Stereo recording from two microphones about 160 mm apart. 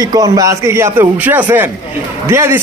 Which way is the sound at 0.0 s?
25° right (ahead or behind).